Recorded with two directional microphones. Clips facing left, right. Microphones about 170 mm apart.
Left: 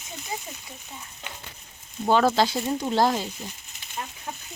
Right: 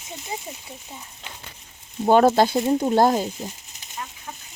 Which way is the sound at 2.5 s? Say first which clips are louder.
Right 7 dB; 30° right (ahead or behind).